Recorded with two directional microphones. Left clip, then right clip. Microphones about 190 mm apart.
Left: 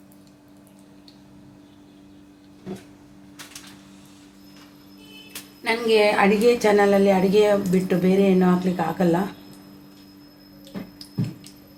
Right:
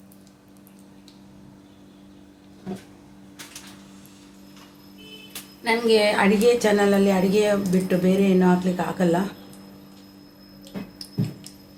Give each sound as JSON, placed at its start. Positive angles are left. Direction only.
{"t": 5.6, "sound": "a woman's voice", "side_deg": 35}